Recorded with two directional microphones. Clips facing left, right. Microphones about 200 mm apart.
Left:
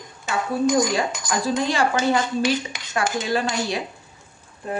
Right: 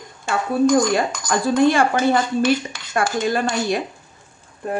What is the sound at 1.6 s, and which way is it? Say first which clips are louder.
A woman's voice: right 8 dB; 55° right (ahead or behind).